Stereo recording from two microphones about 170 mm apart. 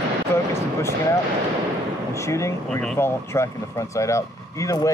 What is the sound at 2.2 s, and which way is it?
Speech, 15° left (ahead or behind).